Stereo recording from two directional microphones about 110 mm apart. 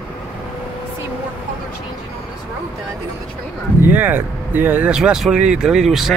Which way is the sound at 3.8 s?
15° right (ahead or behind).